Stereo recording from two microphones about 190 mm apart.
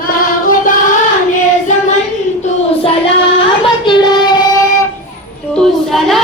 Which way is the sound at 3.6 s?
25° left (ahead or behind).